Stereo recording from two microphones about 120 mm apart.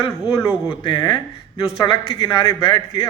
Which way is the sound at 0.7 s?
45° left (ahead or behind).